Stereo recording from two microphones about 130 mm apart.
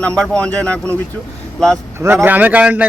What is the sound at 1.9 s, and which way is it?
Speech, 15° right (ahead or behind).